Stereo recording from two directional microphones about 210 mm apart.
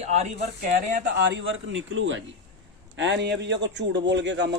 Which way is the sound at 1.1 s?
55° right (ahead or behind).